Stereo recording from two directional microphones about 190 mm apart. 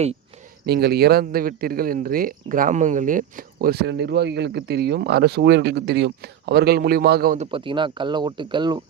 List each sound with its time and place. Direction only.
0.6 s speech: 60° right (ahead or behind)
7.3 s speech: 25° right (ahead or behind)